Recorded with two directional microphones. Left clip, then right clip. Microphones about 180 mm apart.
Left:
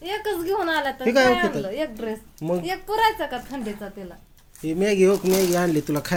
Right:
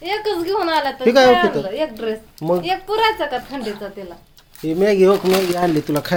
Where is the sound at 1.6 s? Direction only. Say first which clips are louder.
Right 6 dB; 35° left (ahead or behind).